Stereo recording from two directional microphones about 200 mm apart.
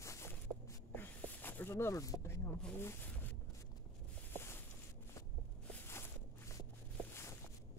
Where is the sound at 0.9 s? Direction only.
10° left (ahead or behind).